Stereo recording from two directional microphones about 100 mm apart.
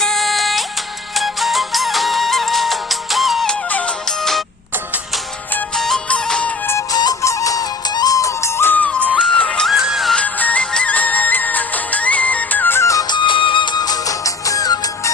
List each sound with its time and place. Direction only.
0.0 s music: 5° left (ahead or behind)
5.7 s music: 5° left (ahead or behind)
6.9 s music: 40° left (ahead or behind); by 9.6 s 10° left (ahead or behind)
9.6 s music: 5° right (ahead or behind)
10.2 s music: 15° left (ahead or behind); by 13.1 s 30° left (ahead or behind)
13.1 s music: 55° left (ahead or behind); by 15.1 s 35° left (ahead or behind)